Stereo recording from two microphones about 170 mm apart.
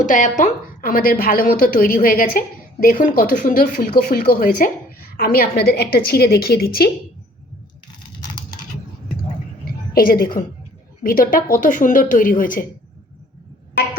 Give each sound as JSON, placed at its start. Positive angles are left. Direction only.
{"t": 0.0, "sound": "a woman's voice", "side_deg": 50}
{"t": 9.9, "sound": "a woman's voice", "side_deg": 60}